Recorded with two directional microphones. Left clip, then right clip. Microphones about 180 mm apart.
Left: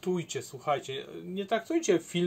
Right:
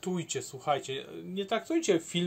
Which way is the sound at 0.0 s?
20° right (ahead or behind).